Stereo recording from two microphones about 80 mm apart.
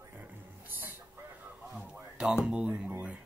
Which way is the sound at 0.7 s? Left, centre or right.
Right.